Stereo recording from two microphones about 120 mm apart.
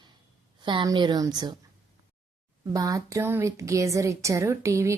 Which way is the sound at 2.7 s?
30° right (ahead or behind).